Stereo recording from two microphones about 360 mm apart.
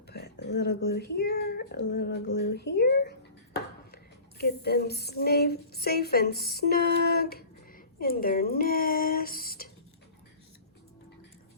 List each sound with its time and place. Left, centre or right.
0.1 s speech: left